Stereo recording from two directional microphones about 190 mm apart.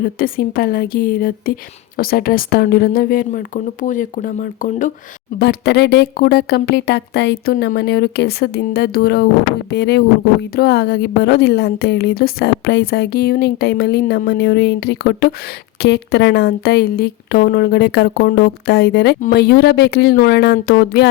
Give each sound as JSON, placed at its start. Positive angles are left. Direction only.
{"t": 0.0, "sound": "speech", "side_deg": 50}
{"t": 5.4, "sound": "a woman's voice", "side_deg": 60}